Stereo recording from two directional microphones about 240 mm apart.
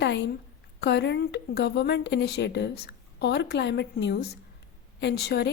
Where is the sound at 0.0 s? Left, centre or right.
Left.